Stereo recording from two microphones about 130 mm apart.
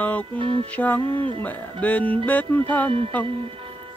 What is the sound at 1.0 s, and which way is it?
Speech, 40° right (ahead or behind).